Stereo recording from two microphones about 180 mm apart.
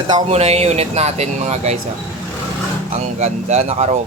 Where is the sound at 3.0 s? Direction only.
40° right (ahead or behind).